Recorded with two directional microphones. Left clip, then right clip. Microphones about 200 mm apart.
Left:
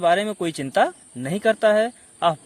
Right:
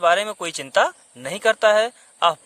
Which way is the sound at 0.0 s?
15° right (ahead or behind).